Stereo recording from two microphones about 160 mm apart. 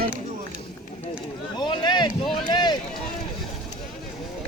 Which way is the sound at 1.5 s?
25° left (ahead or behind).